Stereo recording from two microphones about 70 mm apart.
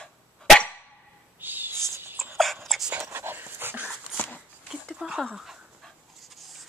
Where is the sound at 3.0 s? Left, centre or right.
Right.